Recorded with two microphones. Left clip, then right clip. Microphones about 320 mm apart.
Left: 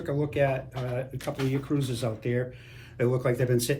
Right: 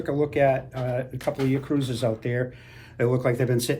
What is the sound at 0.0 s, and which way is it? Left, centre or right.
A man's voice, right.